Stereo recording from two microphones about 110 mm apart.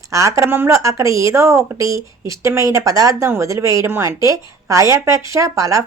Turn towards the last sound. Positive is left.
turn(degrees=-30)  # may be behind; listen again after turning